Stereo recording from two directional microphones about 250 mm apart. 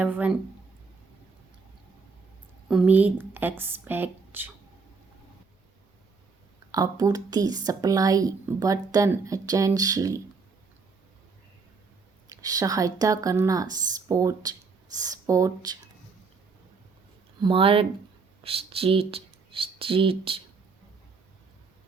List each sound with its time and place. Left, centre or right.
0.0 s a woman's voice: centre
2.6 s a woman's voice: centre
6.7 s a woman's voice: centre
12.4 s a woman's voice: centre
17.4 s speech: right